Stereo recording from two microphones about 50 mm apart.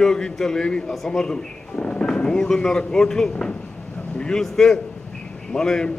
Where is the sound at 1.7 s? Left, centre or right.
Left.